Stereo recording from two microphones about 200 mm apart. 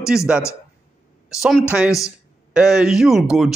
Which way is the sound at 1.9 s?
15° left (ahead or behind).